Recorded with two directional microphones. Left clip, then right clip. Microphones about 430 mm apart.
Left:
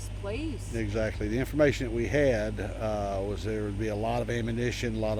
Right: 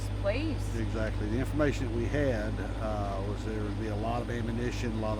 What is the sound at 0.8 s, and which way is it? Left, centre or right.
Speech, centre.